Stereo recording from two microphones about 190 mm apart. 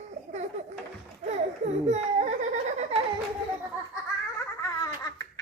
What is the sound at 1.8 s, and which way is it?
Giggle, 35° right (ahead or behind).